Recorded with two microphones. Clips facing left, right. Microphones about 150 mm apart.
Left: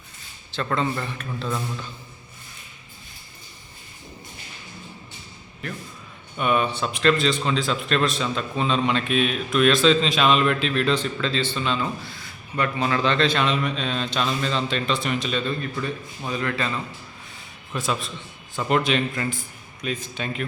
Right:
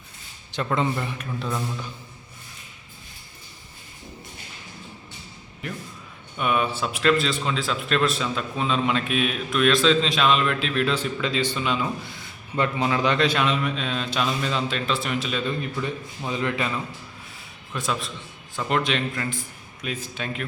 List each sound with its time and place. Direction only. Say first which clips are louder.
0.5 s a man's voice: even; 15° right (ahead or behind)
6.3 s a man's voice: left 2 dB; centre (ahead or behind)
15.6 s a man's voice: even; 20° right (ahead or behind)
17.7 s a man's voice: left 1 dB; centre (ahead or behind)